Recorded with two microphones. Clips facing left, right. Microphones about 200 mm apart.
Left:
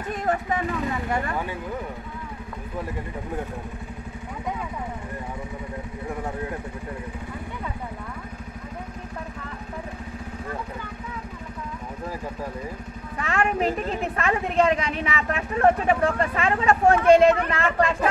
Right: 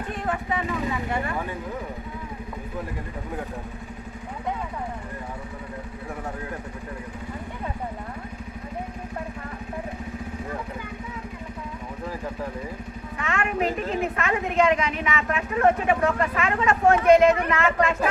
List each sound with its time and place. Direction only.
0.1 s speech: 40° left (ahead or behind)
13.2 s vehicle: 35° left (ahead or behind)
14.1 s a woman's voice: 35° left (ahead or behind)